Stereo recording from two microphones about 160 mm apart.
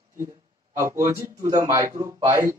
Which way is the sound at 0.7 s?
15° right (ahead or behind).